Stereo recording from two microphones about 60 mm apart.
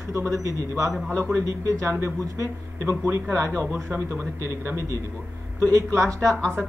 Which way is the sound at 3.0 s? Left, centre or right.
Right.